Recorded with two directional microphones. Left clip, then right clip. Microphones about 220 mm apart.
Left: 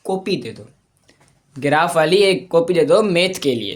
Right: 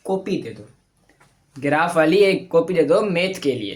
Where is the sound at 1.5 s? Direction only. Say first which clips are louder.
Left 2 dB; 55° left (ahead or behind).